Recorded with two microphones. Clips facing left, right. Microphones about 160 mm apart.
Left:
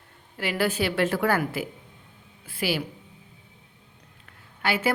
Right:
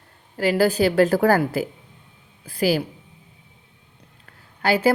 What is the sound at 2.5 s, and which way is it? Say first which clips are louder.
Speech: right 7 dB; 40° right (ahead or behind).